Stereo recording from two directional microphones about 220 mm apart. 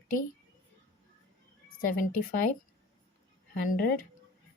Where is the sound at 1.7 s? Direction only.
40° left (ahead or behind).